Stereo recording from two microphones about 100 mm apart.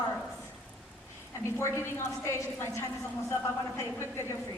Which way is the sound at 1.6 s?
25° left (ahead or behind).